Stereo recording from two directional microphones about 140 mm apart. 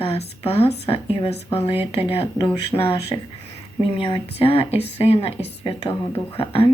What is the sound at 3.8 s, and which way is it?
Speech, 40° left (ahead or behind).